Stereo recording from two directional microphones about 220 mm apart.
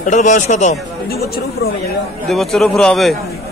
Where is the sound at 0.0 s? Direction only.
35° left (ahead or behind).